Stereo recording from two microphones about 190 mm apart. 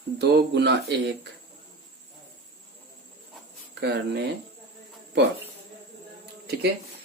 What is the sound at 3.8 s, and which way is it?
Speech, 60° right (ahead or behind).